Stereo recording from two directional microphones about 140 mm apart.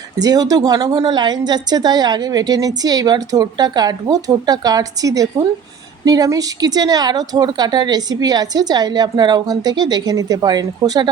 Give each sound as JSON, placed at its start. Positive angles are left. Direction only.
{"t": 0.2, "sound": "a woman's voice", "side_deg": -25}